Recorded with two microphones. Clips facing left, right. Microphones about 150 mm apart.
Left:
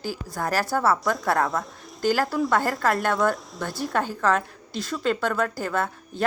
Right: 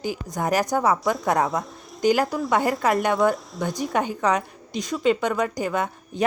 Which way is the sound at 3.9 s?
15° right (ahead or behind).